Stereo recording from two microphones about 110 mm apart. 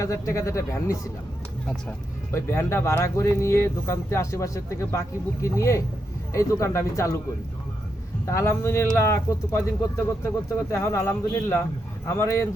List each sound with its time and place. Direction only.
0.0 s speech: 30° left (ahead or behind)
2.3 s speech: 25° left (ahead or behind)
8.3 s speech: 25° left (ahead or behind)